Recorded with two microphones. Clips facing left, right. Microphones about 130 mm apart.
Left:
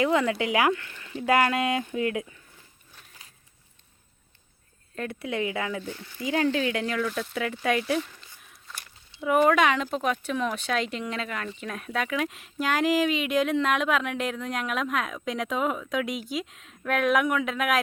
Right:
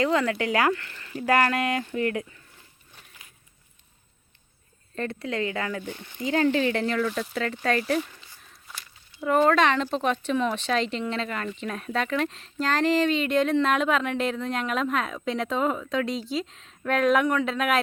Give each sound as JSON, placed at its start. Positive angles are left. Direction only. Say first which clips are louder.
{"t": 0.0, "sound": "speech", "louder": "even", "side_deg": 15}
{"t": 4.9, "sound": "speech", "louder": "right 1 dB", "side_deg": 5}
{"t": 5.8, "sound": "speech", "louder": "right 1 dB", "side_deg": -20}
{"t": 6.5, "sound": "speech", "louder": "right 3 dB", "side_deg": 0}